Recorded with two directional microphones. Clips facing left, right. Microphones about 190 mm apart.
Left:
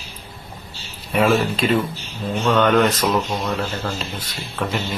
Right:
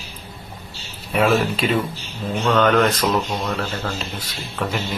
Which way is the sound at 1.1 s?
Centre (ahead or behind).